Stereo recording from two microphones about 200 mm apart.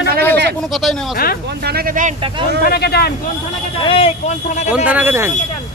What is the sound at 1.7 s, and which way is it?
Speech, 45° right (ahead or behind).